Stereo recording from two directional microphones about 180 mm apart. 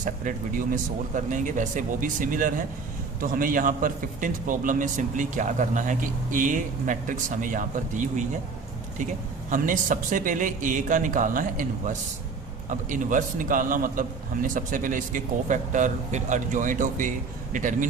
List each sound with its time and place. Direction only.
0.0 s a man's voice: 50° right (ahead or behind)
9.5 s a man's voice: 45° right (ahead or behind)